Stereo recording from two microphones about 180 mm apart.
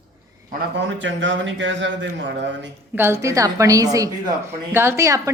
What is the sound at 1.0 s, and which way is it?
A man's voice, 90° right.